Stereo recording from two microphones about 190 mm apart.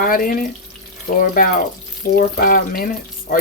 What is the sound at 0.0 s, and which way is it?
Speech, 50° left (ahead or behind).